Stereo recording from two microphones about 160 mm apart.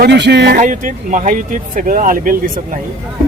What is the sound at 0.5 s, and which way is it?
Speech, 55° right (ahead or behind).